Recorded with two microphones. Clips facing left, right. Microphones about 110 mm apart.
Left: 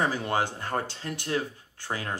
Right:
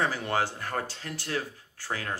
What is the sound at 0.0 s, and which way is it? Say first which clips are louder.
Speech: left 1 dB; 20° left (ahead or behind).